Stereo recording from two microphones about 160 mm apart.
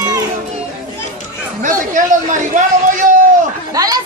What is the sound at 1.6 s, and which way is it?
A man's voice, 55° right (ahead or behind).